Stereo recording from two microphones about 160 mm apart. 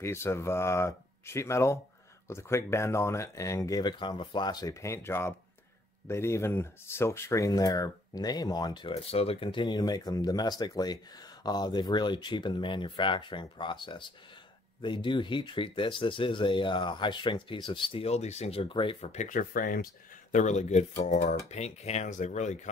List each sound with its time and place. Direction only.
0.0 s speech: 15° left (ahead or behind); by 19.9 s 60° left (ahead or behind)
20.3 s speech: 50° left (ahead or behind)